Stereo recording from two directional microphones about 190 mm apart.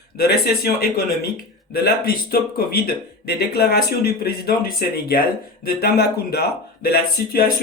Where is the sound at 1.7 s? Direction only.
50° left (ahead or behind).